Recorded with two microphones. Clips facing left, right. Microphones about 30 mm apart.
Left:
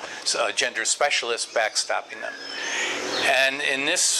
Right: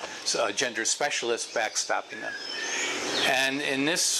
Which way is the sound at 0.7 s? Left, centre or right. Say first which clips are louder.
Left 5 dB; left.